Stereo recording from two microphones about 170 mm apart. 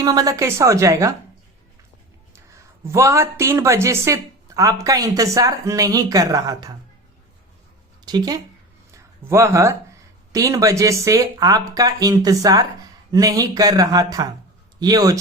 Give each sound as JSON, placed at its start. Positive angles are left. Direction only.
{"t": 0.0, "sound": "a woman's voice", "side_deg": -20}
{"t": 2.8, "sound": "a woman's voice", "side_deg": -15}
{"t": 8.0, "sound": "a woman's voice", "side_deg": -25}